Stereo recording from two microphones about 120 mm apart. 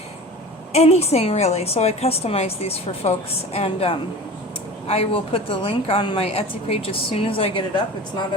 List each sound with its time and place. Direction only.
0.7 s a woman's voice: 60° left (ahead or behind)